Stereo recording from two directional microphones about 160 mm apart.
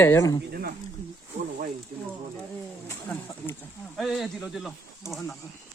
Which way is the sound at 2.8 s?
15° left (ahead or behind).